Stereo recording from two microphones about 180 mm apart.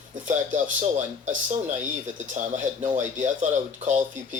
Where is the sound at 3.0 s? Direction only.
45° right (ahead or behind).